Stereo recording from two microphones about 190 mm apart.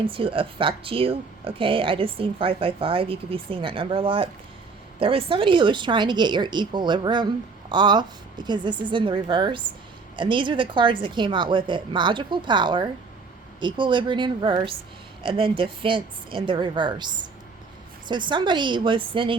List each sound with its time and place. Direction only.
0.0 s speech: 30° right (ahead or behind)